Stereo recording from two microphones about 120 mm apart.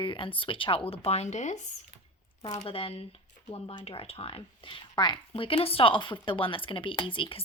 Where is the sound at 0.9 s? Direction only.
60° left (ahead or behind); by 1.5 s 75° left (ahead or behind).